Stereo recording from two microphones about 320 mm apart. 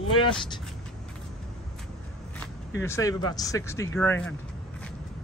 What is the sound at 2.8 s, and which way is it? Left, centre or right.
Speech, centre.